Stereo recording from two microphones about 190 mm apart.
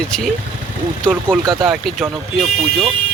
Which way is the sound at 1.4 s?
25° right (ahead or behind).